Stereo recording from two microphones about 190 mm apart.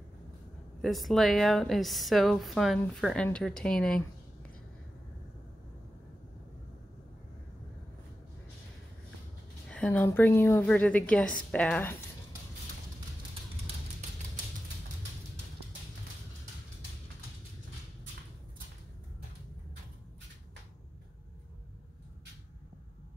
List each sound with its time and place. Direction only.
0.8 s speech: centre (ahead or behind)
9.7 s a woman's voice: 5° left (ahead or behind)